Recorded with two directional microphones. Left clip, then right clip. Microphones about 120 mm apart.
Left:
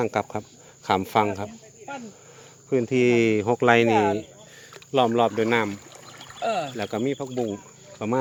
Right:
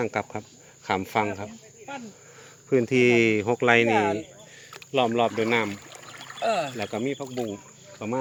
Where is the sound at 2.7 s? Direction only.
10° right (ahead or behind).